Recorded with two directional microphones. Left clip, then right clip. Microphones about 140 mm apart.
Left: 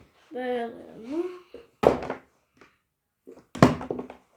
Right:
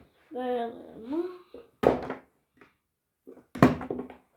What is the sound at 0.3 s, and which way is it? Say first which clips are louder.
Speech: left 1 dB; 5° right (ahead or behind).